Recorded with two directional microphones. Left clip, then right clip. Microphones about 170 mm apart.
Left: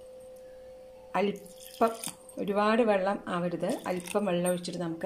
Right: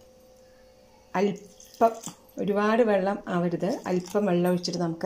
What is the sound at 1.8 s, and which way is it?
Speech, 10° left (ahead or behind).